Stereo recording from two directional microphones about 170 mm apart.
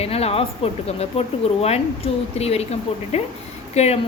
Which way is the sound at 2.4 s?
40° left (ahead or behind).